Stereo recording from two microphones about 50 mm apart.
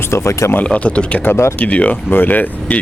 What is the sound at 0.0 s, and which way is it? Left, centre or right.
Speech, left.